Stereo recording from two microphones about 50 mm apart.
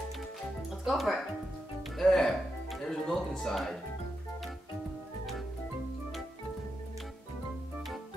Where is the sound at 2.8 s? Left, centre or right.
Centre.